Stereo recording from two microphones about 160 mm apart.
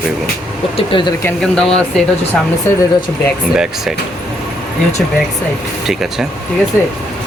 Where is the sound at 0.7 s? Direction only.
30° left (ahead or behind).